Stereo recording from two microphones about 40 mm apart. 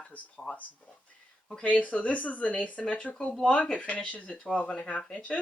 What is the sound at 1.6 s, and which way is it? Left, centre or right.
Speech, left.